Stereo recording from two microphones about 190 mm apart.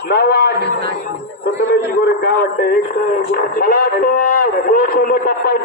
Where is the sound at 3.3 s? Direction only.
50° left (ahead or behind).